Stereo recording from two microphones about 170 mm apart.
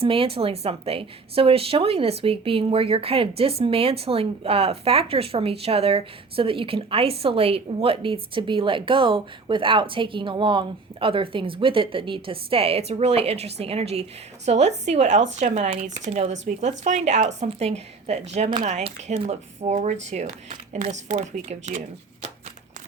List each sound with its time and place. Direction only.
0.0 s a woman's voice: 35° right (ahead or behind)